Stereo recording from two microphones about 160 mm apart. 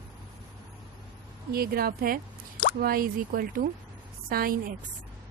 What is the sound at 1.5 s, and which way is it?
Speech, 70° right (ahead or behind).